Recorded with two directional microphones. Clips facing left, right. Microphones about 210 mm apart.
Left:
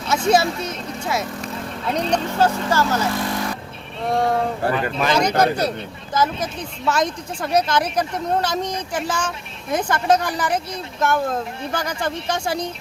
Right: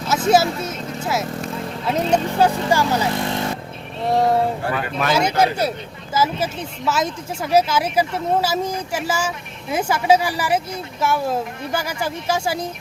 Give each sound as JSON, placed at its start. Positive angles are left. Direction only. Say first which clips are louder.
{"t": 0.1, "sound": "speech", "louder": "right 1 dB", "side_deg": -5}
{"t": 3.2, "sound": "vehicle", "louder": "right 1 dB", "side_deg": -25}
{"t": 4.1, "sound": "speech", "louder": "right 2 dB", "side_deg": -5}